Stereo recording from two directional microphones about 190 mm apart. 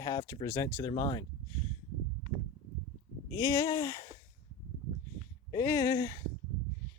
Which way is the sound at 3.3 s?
20° left (ahead or behind).